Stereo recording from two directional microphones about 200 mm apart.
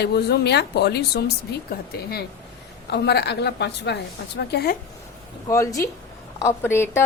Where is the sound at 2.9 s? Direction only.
55° left (ahead or behind).